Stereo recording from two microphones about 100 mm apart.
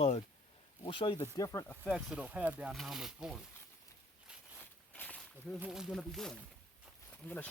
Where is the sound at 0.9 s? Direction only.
55° left (ahead or behind).